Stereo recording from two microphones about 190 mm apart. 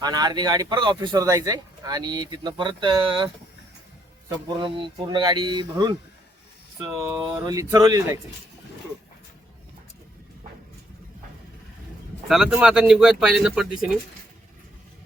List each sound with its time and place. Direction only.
0.0 s speech: 20° right (ahead or behind)
4.4 s speech: 20° right (ahead or behind)
7.0 s speech: 15° right (ahead or behind)
12.3 s speech: 5° right (ahead or behind)